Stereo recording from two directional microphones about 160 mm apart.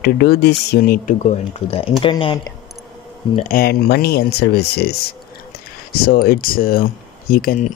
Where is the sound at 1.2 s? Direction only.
40° left (ahead or behind).